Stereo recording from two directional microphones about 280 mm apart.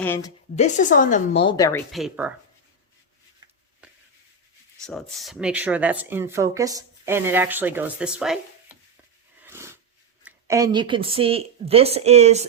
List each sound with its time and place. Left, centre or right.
0.0 s a woman's voice: centre
0.5 s a woman's voice: left
1.9 s speech: centre
4.9 s speech: centre
9.4 s a sound: centre
10.2 s speech: centre